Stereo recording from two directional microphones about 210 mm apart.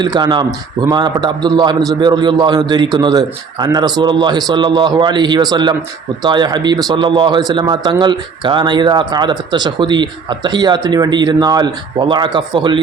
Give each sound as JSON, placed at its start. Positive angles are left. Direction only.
{"t": 0.0, "sound": "speech", "side_deg": -20}